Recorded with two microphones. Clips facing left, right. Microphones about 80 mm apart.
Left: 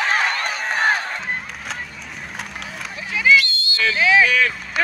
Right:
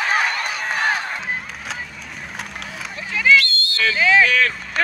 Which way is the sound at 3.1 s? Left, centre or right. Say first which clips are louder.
Even; centre.